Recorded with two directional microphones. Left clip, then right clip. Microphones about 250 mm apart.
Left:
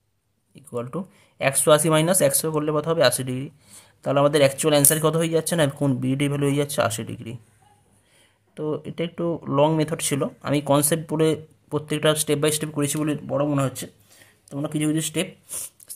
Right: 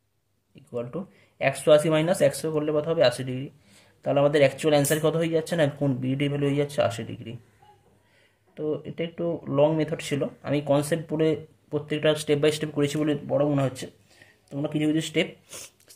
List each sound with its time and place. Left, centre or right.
0.6 s speech: left
8.5 s speech: left